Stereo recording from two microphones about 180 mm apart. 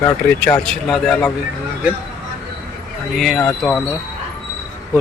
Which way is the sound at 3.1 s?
Centre (ahead or behind).